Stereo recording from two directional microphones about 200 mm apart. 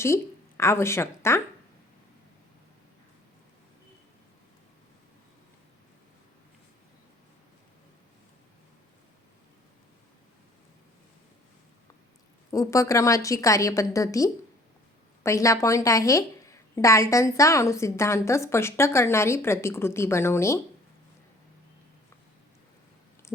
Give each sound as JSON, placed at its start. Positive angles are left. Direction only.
{"t": 0.0, "sound": "speech", "side_deg": 15}
{"t": 12.5, "sound": "a woman's voice", "side_deg": 15}